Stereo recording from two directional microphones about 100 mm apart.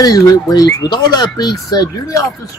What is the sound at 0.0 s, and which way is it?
Speech, 35° left (ahead or behind).